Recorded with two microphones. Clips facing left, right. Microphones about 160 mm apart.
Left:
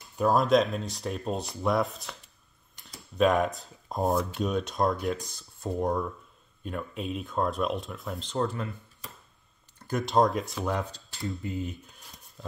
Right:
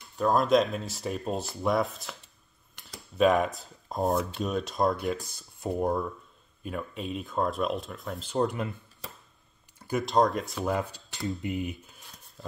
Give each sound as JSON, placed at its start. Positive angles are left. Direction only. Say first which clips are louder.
{"t": 0.2, "sound": "speech", "louder": "even", "side_deg": 0}
{"t": 3.2, "sound": "speech", "louder": "right 1 dB", "side_deg": 0}
{"t": 8.4, "sound": "speech", "louder": "right 2 dB", "side_deg": -15}
{"t": 9.8, "sound": "speech", "louder": "even", "side_deg": -5}
{"t": 11.2, "sound": "speech", "louder": "right 2 dB", "side_deg": -20}
{"t": 11.8, "sound": "a sound", "louder": "left 1 dB", "side_deg": -5}